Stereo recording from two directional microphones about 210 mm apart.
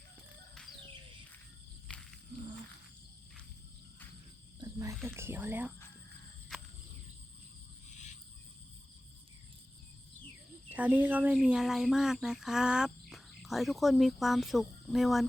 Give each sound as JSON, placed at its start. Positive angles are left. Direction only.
{"t": 1.9, "sound": "a sound", "side_deg": 5}
{"t": 4.6, "sound": "cricket", "side_deg": -15}
{"t": 5.0, "sound": "speech", "side_deg": -10}
{"t": 10.7, "sound": "speech", "side_deg": -10}